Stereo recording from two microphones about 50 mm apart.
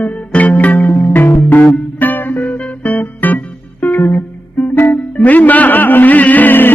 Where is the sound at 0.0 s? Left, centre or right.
Left.